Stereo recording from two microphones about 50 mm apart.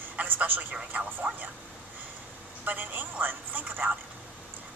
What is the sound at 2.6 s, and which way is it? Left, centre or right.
Speech, right.